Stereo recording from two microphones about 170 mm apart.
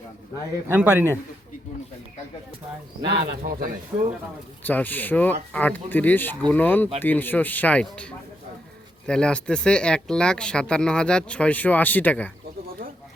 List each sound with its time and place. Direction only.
0.7 s a man's voice: 15° right (ahead or behind)
3.0 s speech: 65° right (ahead or behind)
3.9 s a man's voice: 15° right (ahead or behind)
4.6 s speech: 10° left (ahead or behind)